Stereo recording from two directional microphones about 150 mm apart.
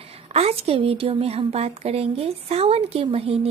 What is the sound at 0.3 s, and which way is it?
A woman's voice, 45° right (ahead or behind).